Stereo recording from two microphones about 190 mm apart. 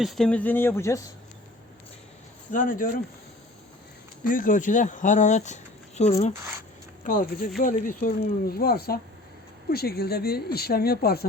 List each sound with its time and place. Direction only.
0.0 s speech: centre (ahead or behind)
2.5 s speech: 45° left (ahead or behind)
4.2 s speech: 45° left (ahead or behind)